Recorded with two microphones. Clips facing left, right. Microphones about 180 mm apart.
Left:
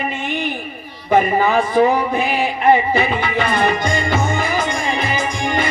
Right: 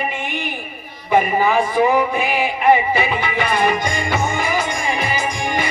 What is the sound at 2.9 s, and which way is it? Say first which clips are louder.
Music: left 2 dB; 50° left (ahead or behind).